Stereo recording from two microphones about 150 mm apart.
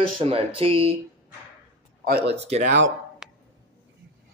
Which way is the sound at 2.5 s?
55° right (ahead or behind).